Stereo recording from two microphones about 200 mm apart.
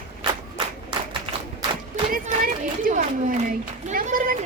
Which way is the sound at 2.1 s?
45° right (ahead or behind).